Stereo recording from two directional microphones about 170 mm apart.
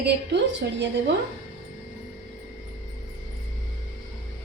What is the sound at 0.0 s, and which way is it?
A woman's voice, 90° right.